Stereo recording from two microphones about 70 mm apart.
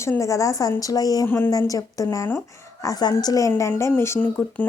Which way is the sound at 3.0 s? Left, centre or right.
Left.